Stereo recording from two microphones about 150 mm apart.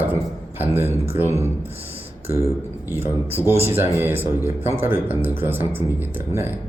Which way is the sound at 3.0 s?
15° right (ahead or behind).